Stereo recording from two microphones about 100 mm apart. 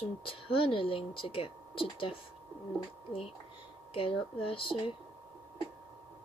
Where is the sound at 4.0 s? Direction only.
65° left (ahead or behind).